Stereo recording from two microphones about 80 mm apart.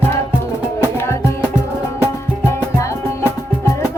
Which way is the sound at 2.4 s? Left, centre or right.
Left.